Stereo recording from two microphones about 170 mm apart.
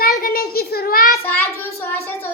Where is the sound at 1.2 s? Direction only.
15° left (ahead or behind).